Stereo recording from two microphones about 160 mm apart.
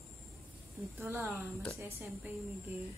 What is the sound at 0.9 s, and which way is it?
Speech, 15° right (ahead or behind).